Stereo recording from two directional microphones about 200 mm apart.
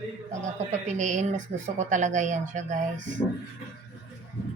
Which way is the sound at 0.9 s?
40° right (ahead or behind).